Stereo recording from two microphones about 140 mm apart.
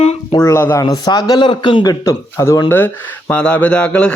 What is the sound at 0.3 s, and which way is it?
A man's voice, 25° left (ahead or behind).